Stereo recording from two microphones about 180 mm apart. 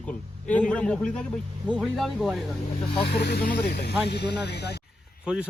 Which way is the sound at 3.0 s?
65° left (ahead or behind).